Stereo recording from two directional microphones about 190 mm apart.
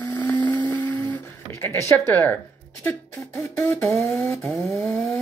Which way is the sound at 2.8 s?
10° left (ahead or behind).